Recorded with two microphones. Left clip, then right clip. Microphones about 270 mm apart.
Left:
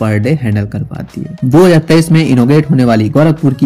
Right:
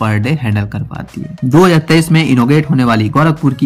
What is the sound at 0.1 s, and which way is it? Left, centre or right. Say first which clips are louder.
Speech: left 3 dB; centre.